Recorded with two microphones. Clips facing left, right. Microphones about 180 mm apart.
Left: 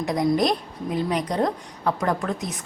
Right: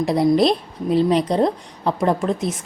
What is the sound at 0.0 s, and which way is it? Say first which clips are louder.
A woman's voice: right 5 dB; 30° right (ahead or behind).